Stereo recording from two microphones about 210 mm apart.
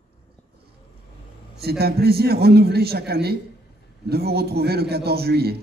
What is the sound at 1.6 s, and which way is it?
A man's voice, 50° right (ahead or behind).